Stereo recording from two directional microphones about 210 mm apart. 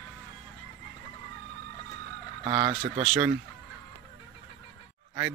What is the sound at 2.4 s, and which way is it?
Speech, 30° right (ahead or behind).